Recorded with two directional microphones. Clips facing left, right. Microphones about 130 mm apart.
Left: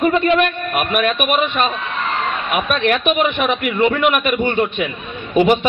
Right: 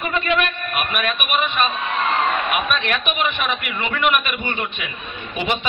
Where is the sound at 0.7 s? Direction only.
45° left (ahead or behind).